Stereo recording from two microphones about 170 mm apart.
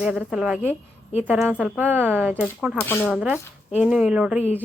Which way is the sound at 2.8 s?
15° left (ahead or behind).